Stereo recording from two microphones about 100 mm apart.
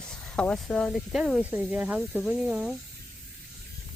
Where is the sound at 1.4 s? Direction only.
15° right (ahead or behind).